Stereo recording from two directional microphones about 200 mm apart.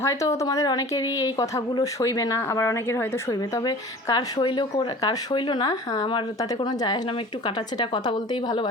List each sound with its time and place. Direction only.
0.0 s a woman's voice: 15° left (ahead or behind)